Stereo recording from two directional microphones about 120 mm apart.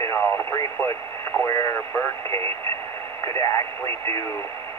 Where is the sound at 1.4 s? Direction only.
30° left (ahead or behind).